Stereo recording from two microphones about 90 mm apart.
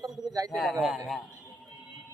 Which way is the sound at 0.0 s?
40° right (ahead or behind).